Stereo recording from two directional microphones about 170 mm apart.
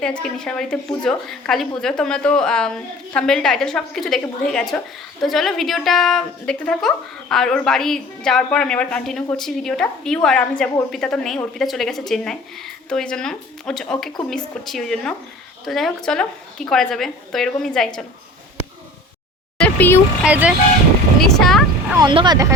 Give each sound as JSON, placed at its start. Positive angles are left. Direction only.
{"t": 0.2, "sound": "a woman's voice", "side_deg": 5}
{"t": 19.5, "sound": "a sound", "side_deg": 10}
{"t": 20.2, "sound": "speech", "side_deg": -10}
{"t": 21.2, "sound": "vehicle", "side_deg": 0}
{"t": 21.9, "sound": "speech", "side_deg": -25}